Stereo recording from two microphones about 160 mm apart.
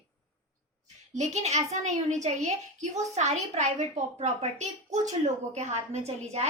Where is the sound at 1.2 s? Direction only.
45° right (ahead or behind).